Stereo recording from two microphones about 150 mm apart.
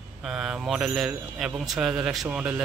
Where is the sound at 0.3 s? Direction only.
5° right (ahead or behind).